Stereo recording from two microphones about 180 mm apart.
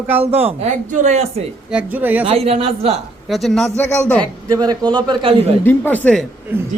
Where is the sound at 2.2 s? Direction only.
35° right (ahead or behind).